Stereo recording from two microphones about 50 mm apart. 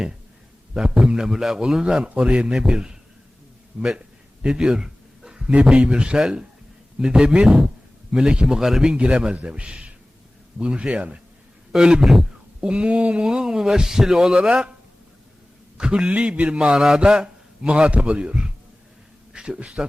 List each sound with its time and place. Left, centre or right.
0.7 s a man's voice: centre
4.4 s a sound: centre
5.6 s a man's voice: centre
9.0 s a man's voice: right
9.6 s speech: centre
10.6 s a man's voice: right
15.8 s a man's voice: centre